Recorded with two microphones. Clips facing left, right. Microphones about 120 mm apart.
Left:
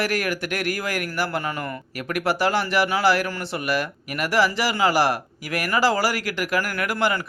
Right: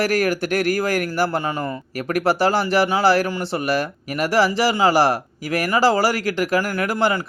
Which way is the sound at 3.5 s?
35° right (ahead or behind).